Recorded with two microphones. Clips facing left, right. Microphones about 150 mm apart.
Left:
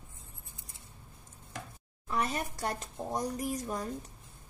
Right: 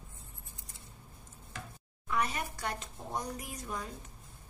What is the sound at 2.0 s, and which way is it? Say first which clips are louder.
Speech: left 1 dB; 35° left (ahead or behind).